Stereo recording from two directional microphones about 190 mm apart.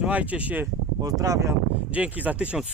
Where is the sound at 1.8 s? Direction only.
5° right (ahead or behind).